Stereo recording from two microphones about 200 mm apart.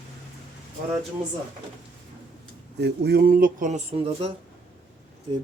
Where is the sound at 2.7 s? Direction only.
55° right (ahead or behind).